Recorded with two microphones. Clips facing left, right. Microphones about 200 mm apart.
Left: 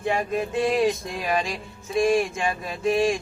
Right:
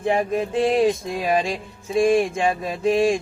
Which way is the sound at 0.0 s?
30° right (ahead or behind).